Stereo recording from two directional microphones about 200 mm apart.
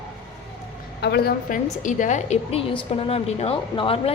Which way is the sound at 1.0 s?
55° left (ahead or behind).